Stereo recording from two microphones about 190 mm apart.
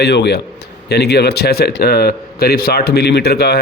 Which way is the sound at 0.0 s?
60° left (ahead or behind).